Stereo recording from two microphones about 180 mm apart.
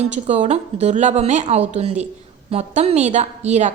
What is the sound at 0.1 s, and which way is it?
A woman's voice, 40° right (ahead or behind).